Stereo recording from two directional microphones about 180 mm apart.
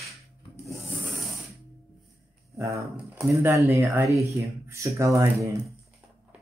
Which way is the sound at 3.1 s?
5° right (ahead or behind).